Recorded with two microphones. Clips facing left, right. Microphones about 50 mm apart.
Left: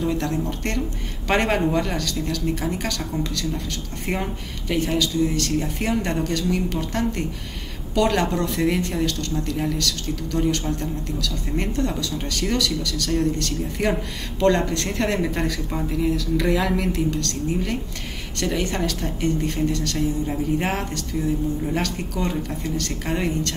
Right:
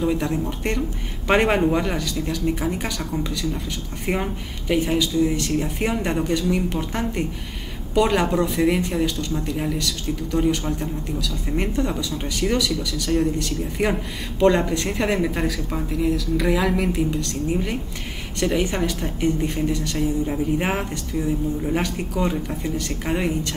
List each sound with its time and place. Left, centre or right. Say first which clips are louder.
0.0 s speech: right 1 dB; centre